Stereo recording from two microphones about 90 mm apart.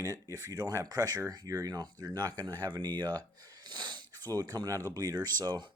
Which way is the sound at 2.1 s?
50° right (ahead or behind).